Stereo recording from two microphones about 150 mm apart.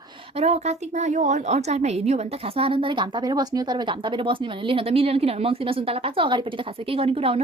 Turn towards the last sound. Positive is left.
turn(degrees=-40)  # may be behind; listen again after turning